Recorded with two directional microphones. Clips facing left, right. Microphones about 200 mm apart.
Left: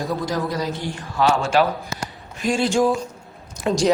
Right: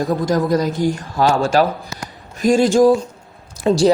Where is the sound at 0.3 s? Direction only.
45° right (ahead or behind).